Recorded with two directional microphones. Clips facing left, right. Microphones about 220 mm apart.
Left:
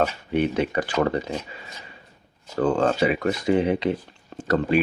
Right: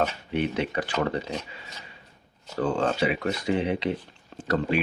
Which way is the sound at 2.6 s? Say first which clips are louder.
Left 4 dB; 50° left (ahead or behind).